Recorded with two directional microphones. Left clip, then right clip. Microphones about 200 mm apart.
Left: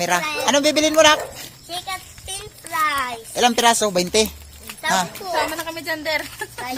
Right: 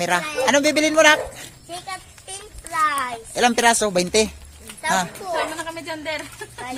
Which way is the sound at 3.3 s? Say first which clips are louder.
Left 1 dB; 10° right (ahead or behind).